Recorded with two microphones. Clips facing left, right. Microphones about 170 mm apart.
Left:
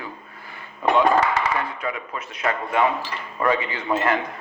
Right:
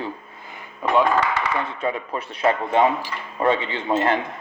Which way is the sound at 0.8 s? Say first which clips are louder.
Left 1 dB; 10° right (ahead or behind).